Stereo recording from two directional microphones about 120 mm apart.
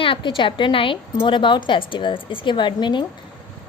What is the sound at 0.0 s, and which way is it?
A woman's voice, 45° left (ahead or behind).